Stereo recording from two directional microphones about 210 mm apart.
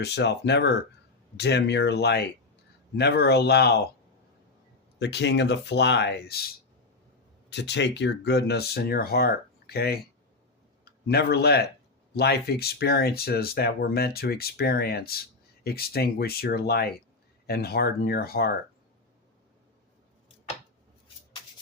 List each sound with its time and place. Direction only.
0.0 s speech: 55° left (ahead or behind)
4.9 s speech: 55° left (ahead or behind)
11.0 s speech: 50° left (ahead or behind)